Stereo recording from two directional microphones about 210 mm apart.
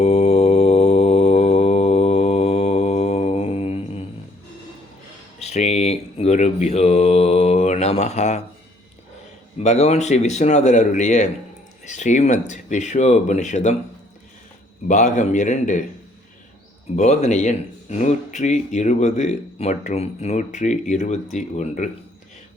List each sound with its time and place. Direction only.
0.0 s mantra: 30° left (ahead or behind)
5.4 s speech: 30° left (ahead or behind)
9.6 s speech: 30° left (ahead or behind)
14.8 s speech: 35° left (ahead or behind)
16.9 s speech: 35° left (ahead or behind)